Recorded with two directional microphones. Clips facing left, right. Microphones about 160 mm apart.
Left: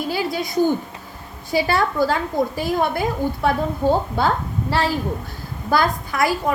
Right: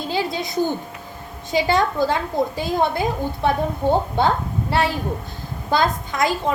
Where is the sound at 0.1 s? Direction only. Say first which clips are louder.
Even; 20° right (ahead or behind).